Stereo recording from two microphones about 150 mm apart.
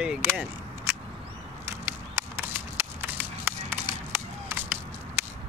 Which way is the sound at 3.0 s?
15° right (ahead or behind).